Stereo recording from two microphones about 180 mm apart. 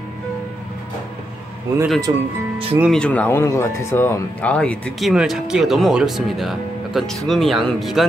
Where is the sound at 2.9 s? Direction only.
5° left (ahead or behind).